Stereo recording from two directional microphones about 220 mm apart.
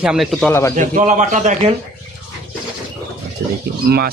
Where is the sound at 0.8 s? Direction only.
35° right (ahead or behind).